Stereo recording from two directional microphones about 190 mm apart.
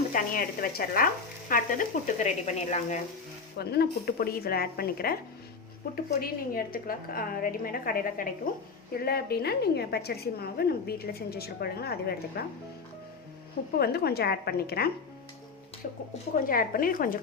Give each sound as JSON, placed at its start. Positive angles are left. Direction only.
{"t": 0.1, "sound": "frying", "side_deg": 50}
{"t": 3.6, "sound": "frying", "side_deg": 55}
{"t": 6.2, "sound": "frying", "side_deg": 50}
{"t": 8.9, "sound": "a woman's voice", "side_deg": 55}
{"t": 13.7, "sound": "a woman's voice", "side_deg": 55}
{"t": 16.3, "sound": "frying", "side_deg": 50}